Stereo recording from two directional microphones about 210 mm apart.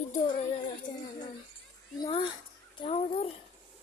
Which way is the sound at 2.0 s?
25° left (ahead or behind).